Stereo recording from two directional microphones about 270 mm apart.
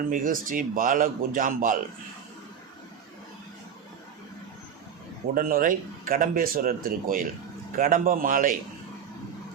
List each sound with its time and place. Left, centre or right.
0.1 s speech: right
5.3 s speech: right